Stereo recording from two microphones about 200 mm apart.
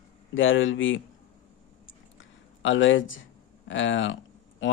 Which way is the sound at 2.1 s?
70° left (ahead or behind).